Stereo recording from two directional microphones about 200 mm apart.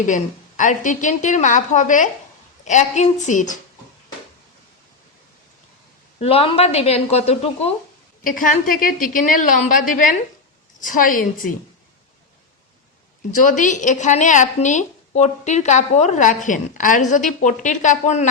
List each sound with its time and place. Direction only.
0.0 s a woman's voice: 40° left (ahead or behind)
6.1 s a woman's voice: 30° left (ahead or behind)
8.2 s a woman's voice: 45° left (ahead or behind)
13.3 s a woman's voice: 40° left (ahead or behind)